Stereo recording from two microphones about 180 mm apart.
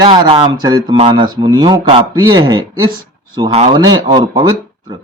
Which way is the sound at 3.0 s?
25° right (ahead or behind).